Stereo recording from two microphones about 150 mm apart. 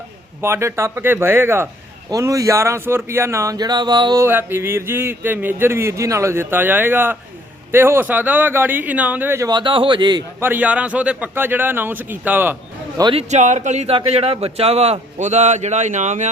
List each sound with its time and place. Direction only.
0.4 s a man's voice: 15° right (ahead or behind)
4.3 s a man's voice: 15° right (ahead or behind)
9.5 s a man's voice: 30° right (ahead or behind)
10.4 s a man's voice: 10° right (ahead or behind)
13.1 s a man's voice: 50° right (ahead or behind)